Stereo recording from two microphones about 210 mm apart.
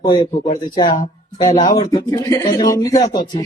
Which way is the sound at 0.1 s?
30° left (ahead or behind).